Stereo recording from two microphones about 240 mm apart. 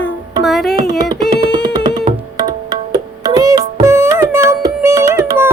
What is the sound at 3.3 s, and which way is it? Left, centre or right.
Music, centre.